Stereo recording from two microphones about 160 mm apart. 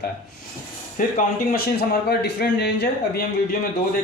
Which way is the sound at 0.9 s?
65° left (ahead or behind).